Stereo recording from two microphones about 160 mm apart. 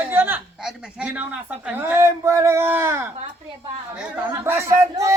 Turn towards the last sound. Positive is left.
turn(degrees=-20)  # may be behind; listen again after turning